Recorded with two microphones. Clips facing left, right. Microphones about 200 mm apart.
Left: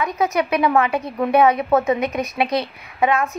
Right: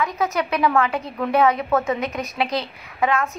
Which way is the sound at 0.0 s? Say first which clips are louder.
Left 3 dB; 15° left (ahead or behind).